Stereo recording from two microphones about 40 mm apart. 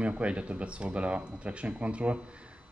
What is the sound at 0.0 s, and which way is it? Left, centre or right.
Speech, right.